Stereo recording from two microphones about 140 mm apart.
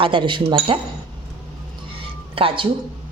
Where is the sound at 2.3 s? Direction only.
40° right (ahead or behind).